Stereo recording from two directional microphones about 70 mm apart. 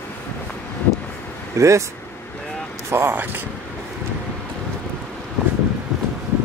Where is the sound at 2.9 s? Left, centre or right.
Right.